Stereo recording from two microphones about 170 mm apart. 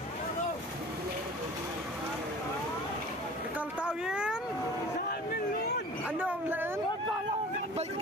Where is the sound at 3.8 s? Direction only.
5° right (ahead or behind).